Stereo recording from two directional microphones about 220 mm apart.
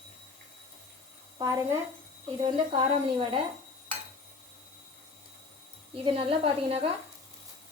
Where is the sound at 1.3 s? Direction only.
15° right (ahead or behind).